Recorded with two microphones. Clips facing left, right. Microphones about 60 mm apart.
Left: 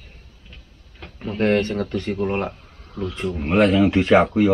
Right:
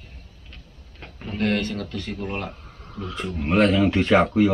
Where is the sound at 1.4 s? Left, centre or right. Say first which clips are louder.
Left 5 dB; left.